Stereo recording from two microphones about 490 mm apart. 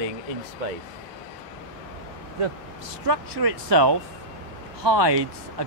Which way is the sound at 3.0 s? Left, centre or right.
Right.